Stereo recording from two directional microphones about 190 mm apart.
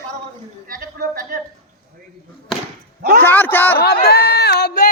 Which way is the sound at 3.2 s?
10° left (ahead or behind).